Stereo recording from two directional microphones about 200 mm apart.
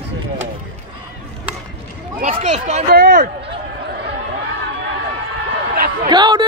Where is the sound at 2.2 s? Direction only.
35° right (ahead or behind).